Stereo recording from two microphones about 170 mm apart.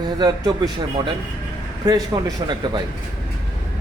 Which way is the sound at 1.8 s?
25° right (ahead or behind).